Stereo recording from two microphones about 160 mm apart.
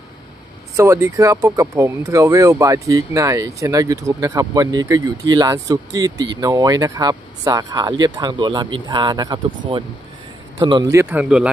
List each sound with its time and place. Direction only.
0.7 s speech: 20° right (ahead or behind)
10.6 s speech: 20° right (ahead or behind)